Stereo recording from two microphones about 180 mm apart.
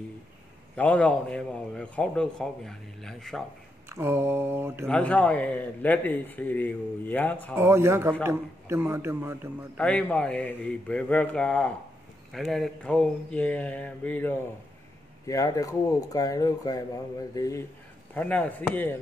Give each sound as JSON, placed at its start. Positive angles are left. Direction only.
{"t": 0.7, "sound": "a man's voice", "side_deg": 5}
{"t": 3.9, "sound": "a man's voice", "side_deg": -15}
{"t": 4.8, "sound": "a man's voice", "side_deg": 5}
{"t": 7.5, "sound": "a man's voice", "side_deg": -15}
{"t": 9.8, "sound": "a man's voice", "side_deg": 5}